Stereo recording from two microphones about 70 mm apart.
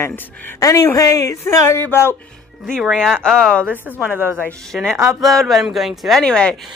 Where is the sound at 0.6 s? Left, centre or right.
Left.